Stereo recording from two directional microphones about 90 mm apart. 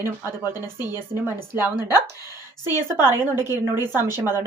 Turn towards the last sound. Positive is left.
turn(degrees=-25)  # may be behind; listen again after turning